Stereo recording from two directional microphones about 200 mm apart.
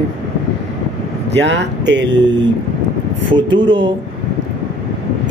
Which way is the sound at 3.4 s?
25° right (ahead or behind).